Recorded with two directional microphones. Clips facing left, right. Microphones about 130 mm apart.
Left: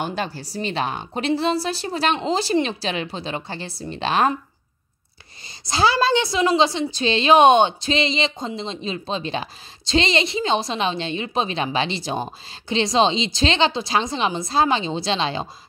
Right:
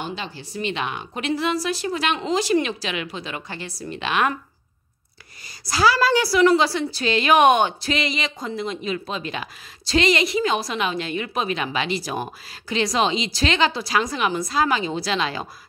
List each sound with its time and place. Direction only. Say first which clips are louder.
0.0 s speech: left 5 dB; 50° left (ahead or behind); by 4.4 s 35° left (ahead or behind)
5.7 s a woman's voice: even; 25° left (ahead or behind)